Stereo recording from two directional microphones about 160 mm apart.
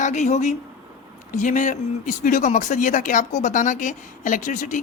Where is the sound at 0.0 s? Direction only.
50° left (ahead or behind).